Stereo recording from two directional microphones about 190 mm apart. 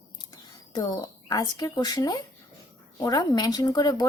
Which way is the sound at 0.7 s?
20° left (ahead or behind).